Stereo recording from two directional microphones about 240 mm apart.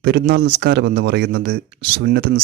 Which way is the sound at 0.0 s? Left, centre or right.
Right.